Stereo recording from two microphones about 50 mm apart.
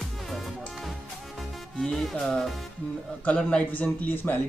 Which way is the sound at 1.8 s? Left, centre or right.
Centre.